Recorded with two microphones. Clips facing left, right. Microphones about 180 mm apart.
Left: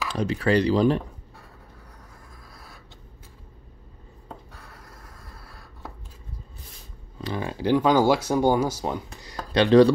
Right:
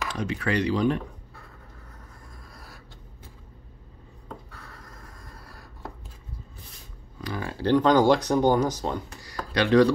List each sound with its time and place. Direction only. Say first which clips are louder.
0.1 s speech: left 6 dB; 30° left (ahead or behind)
7.2 s speech: left 3 dB; 25° left (ahead or behind)